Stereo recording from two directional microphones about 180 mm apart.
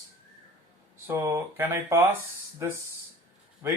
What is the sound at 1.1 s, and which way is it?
Speech, 10° right (ahead or behind).